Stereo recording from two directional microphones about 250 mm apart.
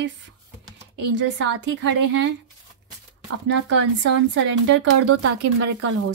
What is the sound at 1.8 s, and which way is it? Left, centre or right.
Speech, right.